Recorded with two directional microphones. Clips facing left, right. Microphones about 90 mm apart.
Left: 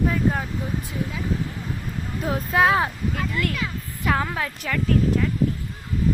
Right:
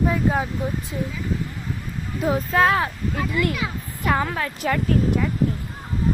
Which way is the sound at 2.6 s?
10° left (ahead or behind).